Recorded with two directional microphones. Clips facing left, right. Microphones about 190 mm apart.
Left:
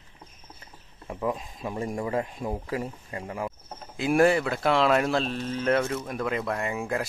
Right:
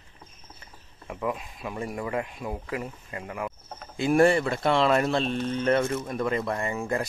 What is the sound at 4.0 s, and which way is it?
Speech, 5° left (ahead or behind).